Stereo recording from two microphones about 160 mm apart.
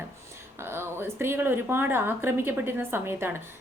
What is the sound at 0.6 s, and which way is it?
Speech, 15° right (ahead or behind).